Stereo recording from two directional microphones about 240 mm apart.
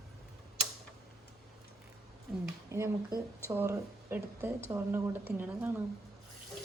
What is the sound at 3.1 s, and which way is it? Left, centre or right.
Speech, centre.